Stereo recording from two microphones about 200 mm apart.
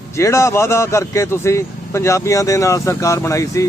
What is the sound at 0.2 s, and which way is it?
Speech, 15° left (ahead or behind).